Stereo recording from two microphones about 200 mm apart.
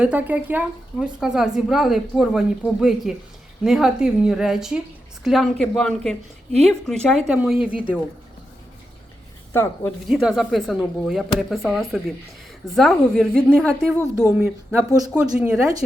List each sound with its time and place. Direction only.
0.0 s a woman's voice: 5° right (ahead or behind)
9.5 s speech: 10° left (ahead or behind)
10.1 s a woman's voice: centre (ahead or behind)